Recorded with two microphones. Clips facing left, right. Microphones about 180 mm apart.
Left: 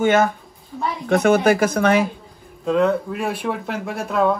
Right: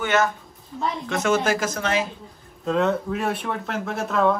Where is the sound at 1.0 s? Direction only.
60° left (ahead or behind).